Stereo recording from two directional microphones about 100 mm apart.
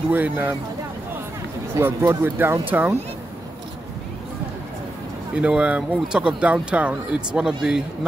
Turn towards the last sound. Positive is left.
turn(degrees=-5)  # may be behind; listen again after turning